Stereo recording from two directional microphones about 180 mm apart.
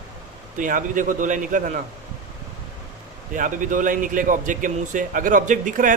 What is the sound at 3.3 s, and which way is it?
Speech, 45° right (ahead or behind).